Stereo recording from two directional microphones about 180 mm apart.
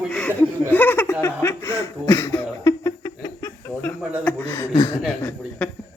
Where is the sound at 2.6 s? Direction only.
15° left (ahead or behind).